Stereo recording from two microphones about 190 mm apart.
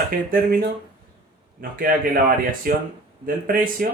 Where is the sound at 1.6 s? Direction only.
50° right (ahead or behind).